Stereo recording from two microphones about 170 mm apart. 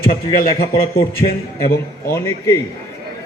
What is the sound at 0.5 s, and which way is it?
Speech, 35° left (ahead or behind).